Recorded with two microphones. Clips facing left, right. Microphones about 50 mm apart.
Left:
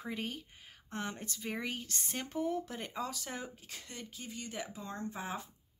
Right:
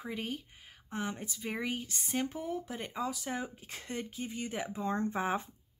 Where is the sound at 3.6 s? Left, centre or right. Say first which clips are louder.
Right 7 dB; right.